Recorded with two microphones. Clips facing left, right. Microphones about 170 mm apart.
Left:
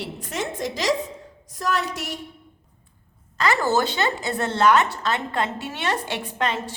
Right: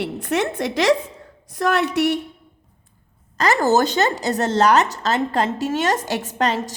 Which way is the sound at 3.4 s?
40° right (ahead or behind).